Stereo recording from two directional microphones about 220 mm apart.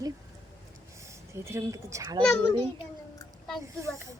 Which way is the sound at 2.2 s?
5° left (ahead or behind).